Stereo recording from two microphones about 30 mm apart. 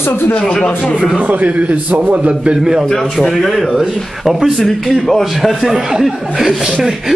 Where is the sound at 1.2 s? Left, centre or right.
Right.